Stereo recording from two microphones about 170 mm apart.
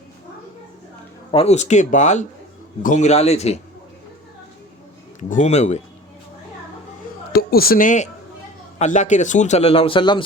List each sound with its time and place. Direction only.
1.3 s a man's voice: 35° left (ahead or behind)
5.3 s a man's voice: 45° left (ahead or behind)
7.3 s a man's voice: 60° left (ahead or behind); by 10.2 s 30° left (ahead or behind)